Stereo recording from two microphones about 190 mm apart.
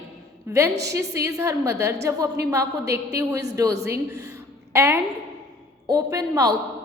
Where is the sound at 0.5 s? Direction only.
15° right (ahead or behind).